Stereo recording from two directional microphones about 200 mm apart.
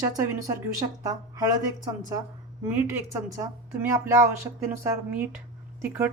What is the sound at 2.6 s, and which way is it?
Speech, 10° right (ahead or behind).